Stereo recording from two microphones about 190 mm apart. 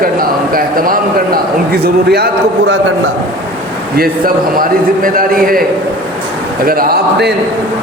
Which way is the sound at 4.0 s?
50° right (ahead or behind).